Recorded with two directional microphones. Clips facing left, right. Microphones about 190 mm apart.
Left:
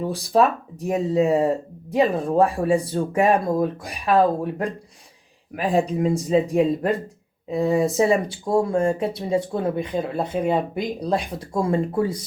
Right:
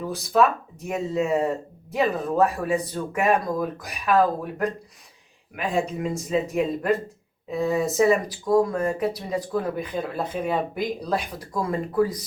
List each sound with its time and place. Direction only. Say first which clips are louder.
0.0 s speech: left 2 dB; 30° left (ahead or behind)